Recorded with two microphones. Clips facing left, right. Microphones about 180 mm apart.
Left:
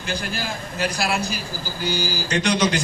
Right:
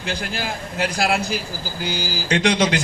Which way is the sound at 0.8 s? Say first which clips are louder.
Right 3 dB; 55° right (ahead or behind).